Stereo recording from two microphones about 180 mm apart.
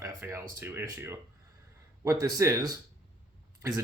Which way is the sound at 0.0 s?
15° right (ahead or behind).